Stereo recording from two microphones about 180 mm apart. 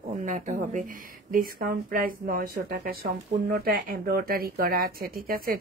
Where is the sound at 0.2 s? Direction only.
45° right (ahead or behind).